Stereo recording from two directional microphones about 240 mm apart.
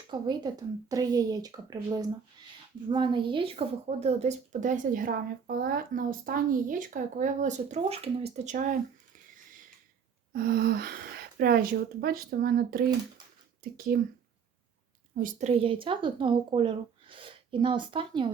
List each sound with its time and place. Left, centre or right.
0.1 s a woman's voice: centre
10.3 s a woman's voice: right
15.1 s a woman's voice: right